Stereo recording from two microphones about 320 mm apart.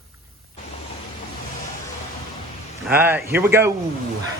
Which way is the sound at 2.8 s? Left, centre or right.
Centre.